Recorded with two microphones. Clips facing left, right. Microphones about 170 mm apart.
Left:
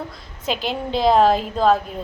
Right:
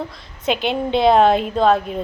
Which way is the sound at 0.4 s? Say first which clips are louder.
Right 4 dB; 65° right (ahead or behind).